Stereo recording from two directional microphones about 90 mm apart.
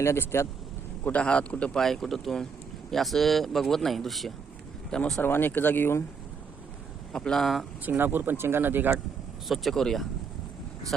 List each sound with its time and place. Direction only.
0.0 s speech: 30° left (ahead or behind)
1.0 s a man's voice: 15° left (ahead or behind)
5.2 s speech: 25° left (ahead or behind)
7.1 s speech: 10° left (ahead or behind)
7.9 s speech: 25° right (ahead or behind)
9.5 s speech: centre (ahead or behind)